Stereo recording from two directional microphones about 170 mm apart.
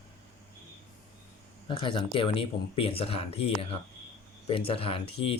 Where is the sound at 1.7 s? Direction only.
30° left (ahead or behind).